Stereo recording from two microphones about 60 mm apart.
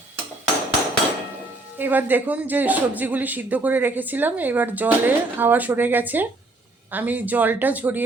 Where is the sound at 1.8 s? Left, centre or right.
Right.